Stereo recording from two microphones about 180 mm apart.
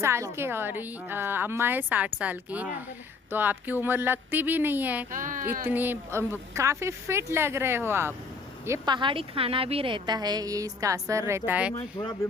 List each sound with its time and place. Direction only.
0.0 s a woman's voice: 15° right (ahead or behind)
5.1 s a child's voice: 45° right (ahead or behind)
5.6 s a woman's voice: 10° right (ahead or behind)
9.0 s a woman's voice: 30° right (ahead or behind); by 11.7 s 10° right (ahead or behind)
11.8 s speech: 25° left (ahead or behind)